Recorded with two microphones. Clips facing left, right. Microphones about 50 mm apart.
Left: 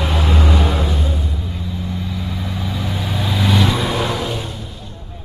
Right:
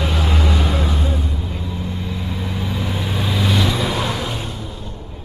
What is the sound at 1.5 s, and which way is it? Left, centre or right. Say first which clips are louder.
Vehicle: even; right.